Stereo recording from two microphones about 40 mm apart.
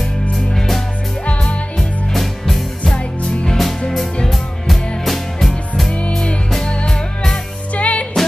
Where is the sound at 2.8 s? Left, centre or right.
Left.